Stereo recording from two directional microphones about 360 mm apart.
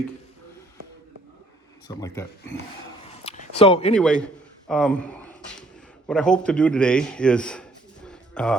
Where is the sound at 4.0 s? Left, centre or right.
Centre.